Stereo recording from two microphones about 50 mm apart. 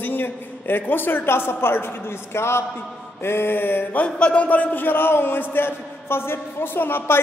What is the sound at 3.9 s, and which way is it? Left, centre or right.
A man's voice, left.